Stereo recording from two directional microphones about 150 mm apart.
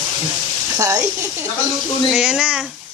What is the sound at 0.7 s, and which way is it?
Speech, 25° right (ahead or behind).